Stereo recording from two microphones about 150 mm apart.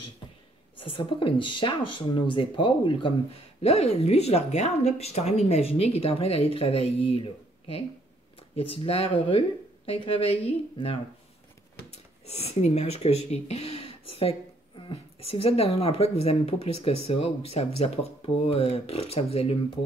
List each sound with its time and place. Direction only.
0.7 s speech: 35° left (ahead or behind)
3.6 s speech: 45° left (ahead or behind)